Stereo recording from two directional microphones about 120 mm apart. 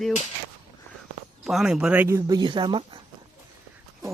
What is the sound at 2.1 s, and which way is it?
Speech, 35° right (ahead or behind).